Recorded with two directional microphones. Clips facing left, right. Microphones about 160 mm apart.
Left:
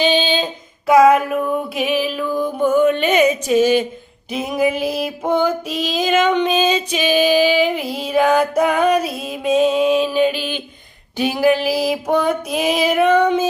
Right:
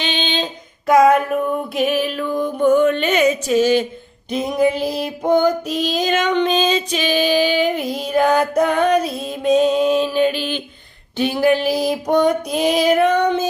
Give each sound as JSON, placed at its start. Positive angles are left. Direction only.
{"t": 0.0, "sound": "female singing", "side_deg": 10}
{"t": 5.6, "sound": "female singing", "side_deg": -40}
{"t": 6.1, "sound": "female singing", "side_deg": 10}